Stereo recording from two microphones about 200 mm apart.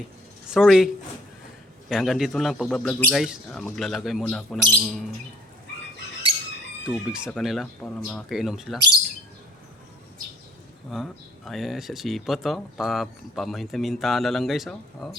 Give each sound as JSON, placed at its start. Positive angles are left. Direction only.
{"t": 0.5, "sound": "speech", "side_deg": 0}
{"t": 1.9, "sound": "speech", "side_deg": 0}
{"t": 6.8, "sound": "speech", "side_deg": -5}
{"t": 10.9, "sound": "speech", "side_deg": 0}